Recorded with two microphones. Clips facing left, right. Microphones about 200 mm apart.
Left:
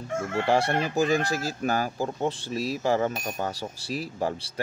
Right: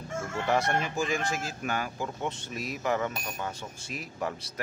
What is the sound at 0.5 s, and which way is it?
Speech, 30° left (ahead or behind).